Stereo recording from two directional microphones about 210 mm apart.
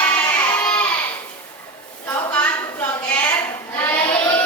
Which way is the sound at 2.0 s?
10° left (ahead or behind).